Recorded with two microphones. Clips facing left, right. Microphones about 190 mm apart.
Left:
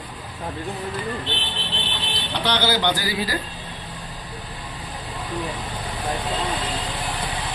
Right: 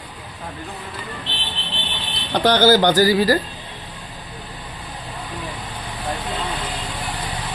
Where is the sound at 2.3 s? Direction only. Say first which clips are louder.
Right 8 dB; 45° right (ahead or behind).